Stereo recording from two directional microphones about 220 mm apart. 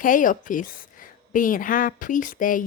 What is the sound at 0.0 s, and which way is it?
Speech, 35° left (ahead or behind).